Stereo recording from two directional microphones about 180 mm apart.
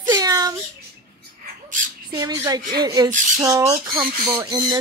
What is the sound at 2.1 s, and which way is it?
Speech, 20° right (ahead or behind).